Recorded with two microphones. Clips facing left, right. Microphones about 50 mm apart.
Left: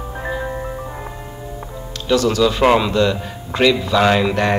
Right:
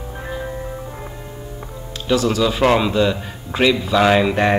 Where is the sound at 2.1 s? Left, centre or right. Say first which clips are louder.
Left 2 dB; centre.